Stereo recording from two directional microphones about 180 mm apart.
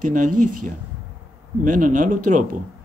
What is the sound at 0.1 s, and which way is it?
Speech, 45° right (ahead or behind).